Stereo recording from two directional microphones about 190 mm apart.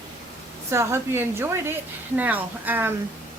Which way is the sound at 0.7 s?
15° right (ahead or behind).